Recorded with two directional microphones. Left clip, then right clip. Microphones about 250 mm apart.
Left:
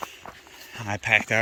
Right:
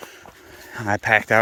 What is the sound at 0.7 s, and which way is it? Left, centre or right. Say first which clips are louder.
Speech: right 4 dB; right.